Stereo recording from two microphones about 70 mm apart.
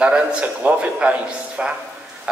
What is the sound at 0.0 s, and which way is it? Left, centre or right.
A man's voice, centre.